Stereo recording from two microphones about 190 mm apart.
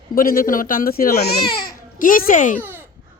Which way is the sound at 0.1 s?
50° left (ahead or behind).